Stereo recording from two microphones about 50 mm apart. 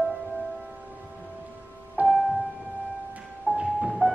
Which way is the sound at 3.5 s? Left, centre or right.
Right.